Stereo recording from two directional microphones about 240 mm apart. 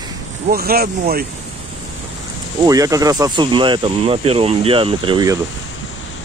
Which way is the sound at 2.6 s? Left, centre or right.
Centre.